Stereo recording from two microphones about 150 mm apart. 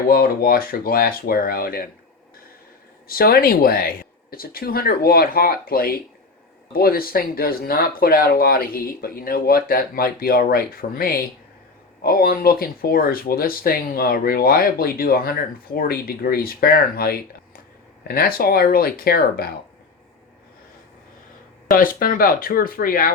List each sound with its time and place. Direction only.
0.1 s speech: 80° left
3.1 s speech: 80° left
21.7 s speech: 75° left (ahead or behind)